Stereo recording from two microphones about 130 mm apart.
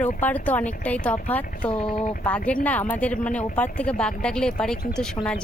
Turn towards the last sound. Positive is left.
turn(degrees=5)  # may be behind; listen again after turning